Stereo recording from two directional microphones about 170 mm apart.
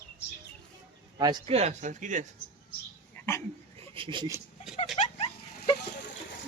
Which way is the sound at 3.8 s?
30° right (ahead or behind).